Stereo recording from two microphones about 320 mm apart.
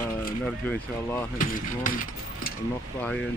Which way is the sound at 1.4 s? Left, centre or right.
Left.